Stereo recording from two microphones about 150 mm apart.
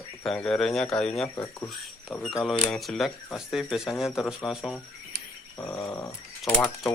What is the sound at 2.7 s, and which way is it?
Speech, centre (ahead or behind).